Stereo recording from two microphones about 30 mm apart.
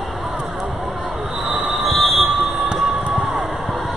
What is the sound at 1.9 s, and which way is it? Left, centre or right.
Train, centre.